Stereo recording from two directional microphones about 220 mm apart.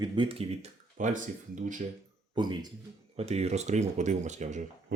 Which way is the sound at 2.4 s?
20° right (ahead or behind).